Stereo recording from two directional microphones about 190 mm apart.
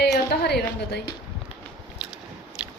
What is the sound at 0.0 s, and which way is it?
Music, 60° left (ahead or behind).